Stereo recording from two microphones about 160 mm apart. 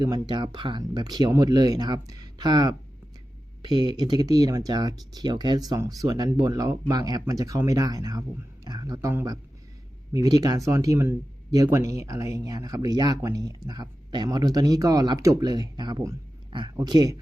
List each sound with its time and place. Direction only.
0.0 s speech: 25° right (ahead or behind)